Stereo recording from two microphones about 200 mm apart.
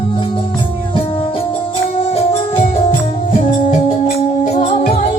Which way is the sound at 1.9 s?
30° left (ahead or behind).